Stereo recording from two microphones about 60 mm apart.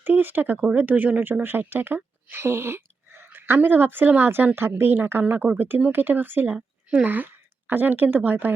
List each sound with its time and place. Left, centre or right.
0.0 s speech: right
2.3 s whispering: right
3.3 s speech: right